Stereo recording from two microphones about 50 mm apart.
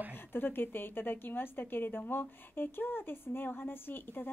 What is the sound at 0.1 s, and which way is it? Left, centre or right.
A woman's voice, left.